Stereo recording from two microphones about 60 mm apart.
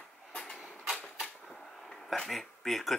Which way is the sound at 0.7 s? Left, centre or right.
Centre.